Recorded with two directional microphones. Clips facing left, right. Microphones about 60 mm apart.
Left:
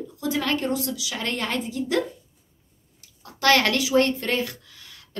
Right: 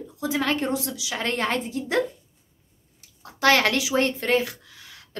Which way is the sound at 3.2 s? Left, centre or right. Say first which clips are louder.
Even; right.